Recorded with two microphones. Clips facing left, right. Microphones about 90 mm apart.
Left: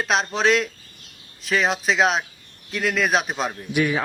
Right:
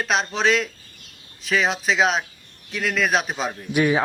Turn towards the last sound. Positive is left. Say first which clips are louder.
# right 2 dB
turn(degrees=-30)  # may be behind; listen again after turning